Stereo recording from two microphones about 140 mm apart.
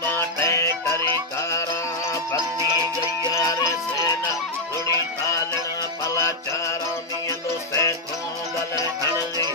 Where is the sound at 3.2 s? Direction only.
25° left (ahead or behind).